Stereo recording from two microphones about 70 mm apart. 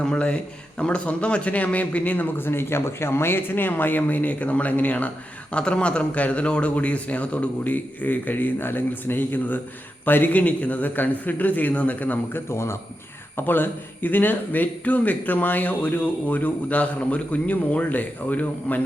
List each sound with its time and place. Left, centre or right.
0.0 s a man's voice: centre
12.5 s speech: left
13.3 s a man's voice: left